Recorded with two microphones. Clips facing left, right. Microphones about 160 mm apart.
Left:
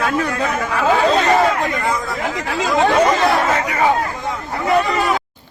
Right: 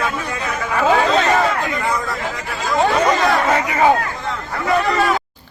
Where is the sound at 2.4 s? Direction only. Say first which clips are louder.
Left 5 dB; 90° left.